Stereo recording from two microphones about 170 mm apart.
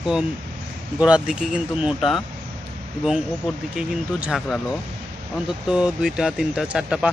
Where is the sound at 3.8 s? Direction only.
5° right (ahead or behind).